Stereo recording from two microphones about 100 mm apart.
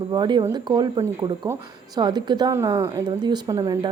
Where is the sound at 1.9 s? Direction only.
45° right (ahead or behind).